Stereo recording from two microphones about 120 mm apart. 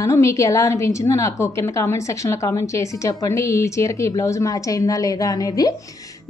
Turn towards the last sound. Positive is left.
turn(degrees=30)  # may be behind; listen again after turning